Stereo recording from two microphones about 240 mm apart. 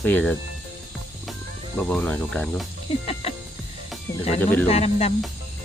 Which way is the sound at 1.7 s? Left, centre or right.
Centre.